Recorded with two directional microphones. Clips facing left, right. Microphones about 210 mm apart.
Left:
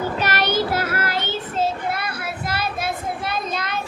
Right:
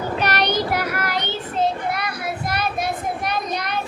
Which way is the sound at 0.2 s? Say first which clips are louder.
Right 1 dB; 15° right (ahead or behind).